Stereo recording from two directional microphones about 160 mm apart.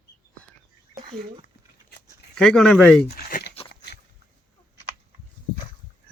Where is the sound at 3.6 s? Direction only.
40° left (ahead or behind).